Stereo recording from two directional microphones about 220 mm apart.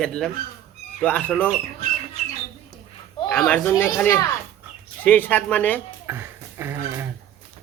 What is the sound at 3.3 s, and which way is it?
Speech, 5° left (ahead or behind).